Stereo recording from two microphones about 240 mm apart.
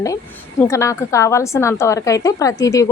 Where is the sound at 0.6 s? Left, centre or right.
Centre.